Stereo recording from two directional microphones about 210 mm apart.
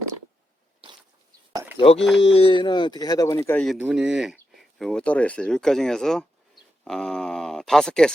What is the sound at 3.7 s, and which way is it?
Speech, 5° right (ahead or behind).